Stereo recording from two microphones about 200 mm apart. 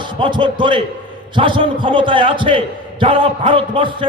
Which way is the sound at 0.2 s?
25° right (ahead or behind).